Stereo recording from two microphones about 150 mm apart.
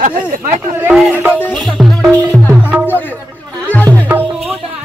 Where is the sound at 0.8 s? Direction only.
10° right (ahead or behind).